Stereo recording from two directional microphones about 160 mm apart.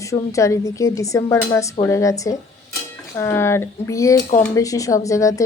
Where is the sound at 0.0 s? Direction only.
20° left (ahead or behind).